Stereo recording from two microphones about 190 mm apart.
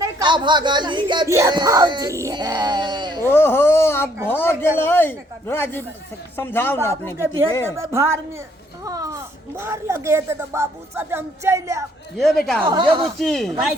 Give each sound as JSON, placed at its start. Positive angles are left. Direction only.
{"t": 0.0, "sound": "speech", "side_deg": -25}
{"t": 3.2, "sound": "speech", "side_deg": 10}
{"t": 7.8, "sound": "speech", "side_deg": -15}
{"t": 12.6, "sound": "speech", "side_deg": -25}
{"t": 13.1, "sound": "speech", "side_deg": 0}